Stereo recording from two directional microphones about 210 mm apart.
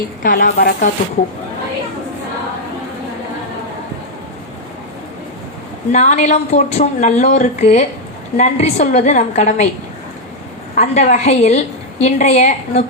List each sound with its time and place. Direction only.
0.2 s speech: 45° left (ahead or behind)
5.9 s a woman's voice: 35° left (ahead or behind)
10.8 s a woman's voice: 35° left (ahead or behind)